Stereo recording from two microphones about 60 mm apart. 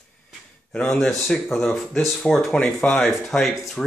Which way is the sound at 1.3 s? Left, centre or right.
Centre.